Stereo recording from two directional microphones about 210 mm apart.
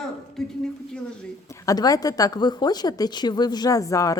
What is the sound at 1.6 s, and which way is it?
A woman's voice, 15° left (ahead or behind).